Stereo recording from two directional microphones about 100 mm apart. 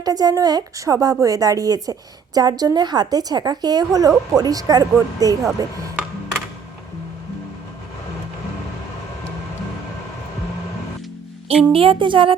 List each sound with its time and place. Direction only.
0.0 s a woman's voice: 40° right (ahead or behind)
11.4 s speech: 65° right (ahead or behind)